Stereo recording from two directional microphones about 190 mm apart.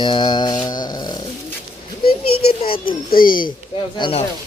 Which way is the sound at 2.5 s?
30° left (ahead or behind).